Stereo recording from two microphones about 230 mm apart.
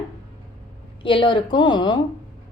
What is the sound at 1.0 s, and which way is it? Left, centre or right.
Speech, left.